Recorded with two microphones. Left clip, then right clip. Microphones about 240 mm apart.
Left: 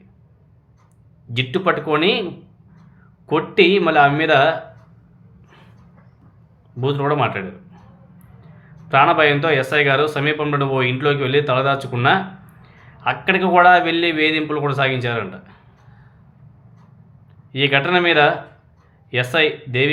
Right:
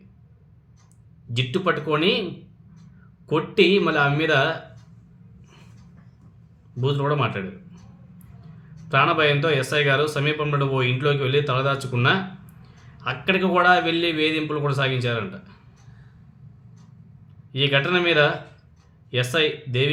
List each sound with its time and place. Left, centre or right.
1.4 s a man's voice: centre
3.2 s a man's voice: centre
6.9 s a man's voice: centre
8.9 s a man's voice: centre
17.5 s a man's voice: centre